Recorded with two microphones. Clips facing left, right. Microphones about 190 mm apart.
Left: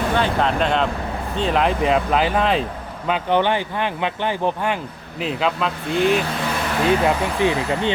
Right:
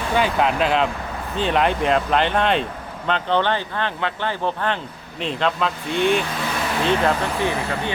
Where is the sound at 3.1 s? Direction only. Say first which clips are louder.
Left 2 dB; 15° left (ahead or behind).